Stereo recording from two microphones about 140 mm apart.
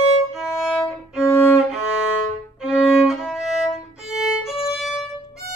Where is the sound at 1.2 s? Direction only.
15° left (ahead or behind).